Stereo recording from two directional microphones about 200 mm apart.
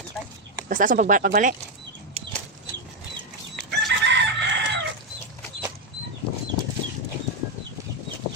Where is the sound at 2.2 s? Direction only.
30° right (ahead or behind).